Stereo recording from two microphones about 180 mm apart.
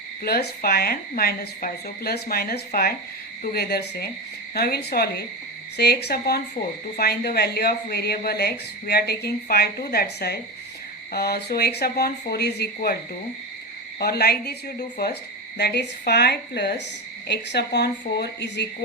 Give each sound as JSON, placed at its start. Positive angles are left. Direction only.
{"t": 0.2, "sound": "speech", "side_deg": 60}
{"t": 14.0, "sound": "speech", "side_deg": 60}